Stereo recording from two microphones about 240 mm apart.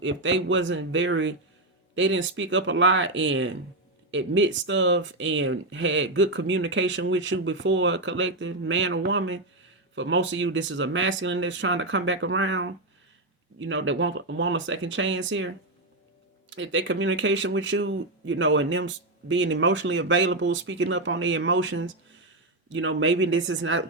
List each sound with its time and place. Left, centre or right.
0.0 s speech: right